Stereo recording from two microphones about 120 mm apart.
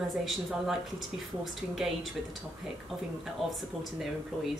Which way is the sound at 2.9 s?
Centre (ahead or behind).